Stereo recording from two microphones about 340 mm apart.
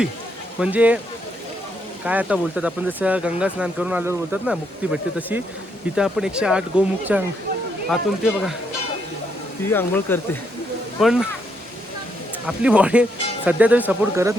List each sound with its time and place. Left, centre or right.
0.6 s speech: centre
2.0 s speech: centre
9.6 s speech: centre
12.5 s speech: centre